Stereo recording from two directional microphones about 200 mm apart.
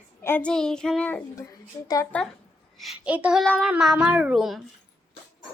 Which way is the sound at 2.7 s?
Centre (ahead or behind).